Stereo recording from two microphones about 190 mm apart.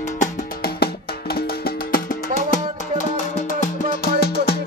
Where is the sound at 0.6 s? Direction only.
55° left (ahead or behind).